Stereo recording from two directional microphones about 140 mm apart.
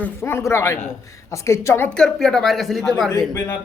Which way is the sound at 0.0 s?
15° left (ahead or behind).